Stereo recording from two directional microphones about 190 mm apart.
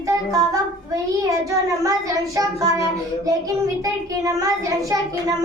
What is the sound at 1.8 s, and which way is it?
Child singing, 20° right (ahead or behind).